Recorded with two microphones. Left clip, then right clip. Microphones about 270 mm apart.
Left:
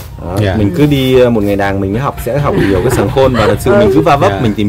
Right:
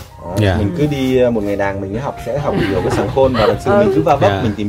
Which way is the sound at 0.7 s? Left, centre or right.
Left.